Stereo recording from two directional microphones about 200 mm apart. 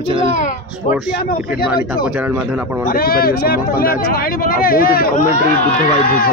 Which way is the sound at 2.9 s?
50° left (ahead or behind).